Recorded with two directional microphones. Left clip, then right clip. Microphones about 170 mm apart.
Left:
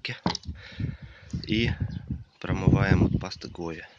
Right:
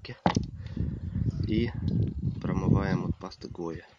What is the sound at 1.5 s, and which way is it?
Speech, centre (ahead or behind).